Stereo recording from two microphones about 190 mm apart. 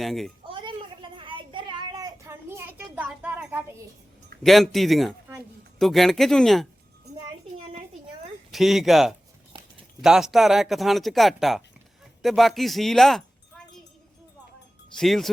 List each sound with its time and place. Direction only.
0.0 s speech: centre (ahead or behind)
0.4 s a sound: 25° right (ahead or behind)
4.4 s speech: centre (ahead or behind)
8.5 s speech: centre (ahead or behind)
9.5 s a sound: 25° right (ahead or behind)
10.0 s speech: 5° right (ahead or behind)
14.9 s speech: centre (ahead or behind)